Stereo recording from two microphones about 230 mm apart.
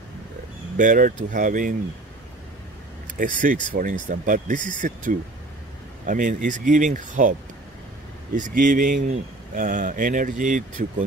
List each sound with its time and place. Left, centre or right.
0.7 s speech: right
3.2 s speech: right
8.4 s speech: right